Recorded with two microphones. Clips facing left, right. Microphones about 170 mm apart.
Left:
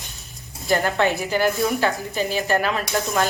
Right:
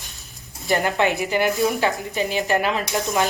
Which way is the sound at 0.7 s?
20° right (ahead or behind).